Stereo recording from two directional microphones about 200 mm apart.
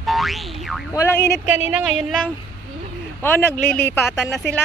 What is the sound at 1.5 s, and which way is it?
Speech, 10° right (ahead or behind).